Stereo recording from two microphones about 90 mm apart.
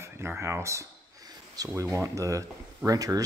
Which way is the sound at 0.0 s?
30° right (ahead or behind).